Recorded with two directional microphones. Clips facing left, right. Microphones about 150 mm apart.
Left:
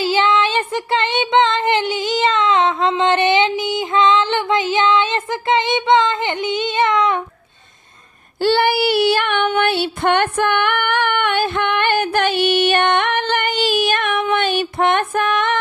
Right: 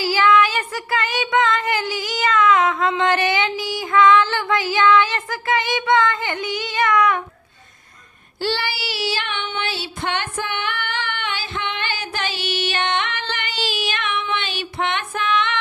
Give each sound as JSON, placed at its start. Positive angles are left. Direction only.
{"t": 0.0, "sound": "child singing", "side_deg": 20}
{"t": 8.4, "sound": "child singing", "side_deg": 55}